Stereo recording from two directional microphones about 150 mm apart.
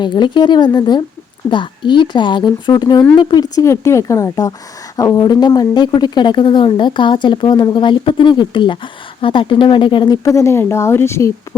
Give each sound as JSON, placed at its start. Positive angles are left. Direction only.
{"t": 0.0, "sound": "speech", "side_deg": 30}